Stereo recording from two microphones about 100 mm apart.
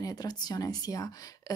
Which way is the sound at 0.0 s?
40° left (ahead or behind).